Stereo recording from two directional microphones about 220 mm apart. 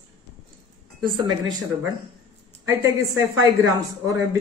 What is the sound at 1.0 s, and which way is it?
Speech, 20° right (ahead or behind).